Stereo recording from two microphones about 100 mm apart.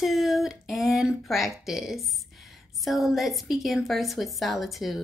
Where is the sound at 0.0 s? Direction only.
Centre (ahead or behind).